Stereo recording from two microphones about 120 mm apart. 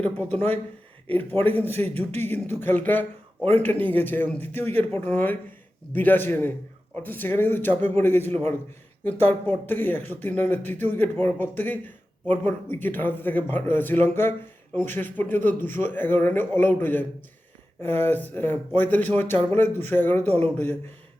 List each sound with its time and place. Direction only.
0.0 s speech: 15° left (ahead or behind)